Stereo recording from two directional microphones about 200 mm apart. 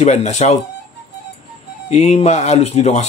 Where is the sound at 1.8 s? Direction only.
35° left (ahead or behind).